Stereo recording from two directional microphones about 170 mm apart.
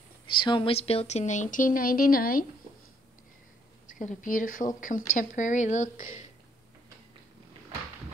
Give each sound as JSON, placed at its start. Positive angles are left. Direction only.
{"t": 0.3, "sound": "speech", "side_deg": 30}
{"t": 3.8, "sound": "speech", "side_deg": 45}